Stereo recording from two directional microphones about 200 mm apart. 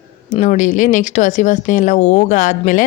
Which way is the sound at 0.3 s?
40° left (ahead or behind).